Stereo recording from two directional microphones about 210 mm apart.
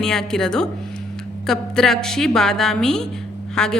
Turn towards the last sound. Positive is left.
turn(degrees=5)  # may be behind; listen again after turning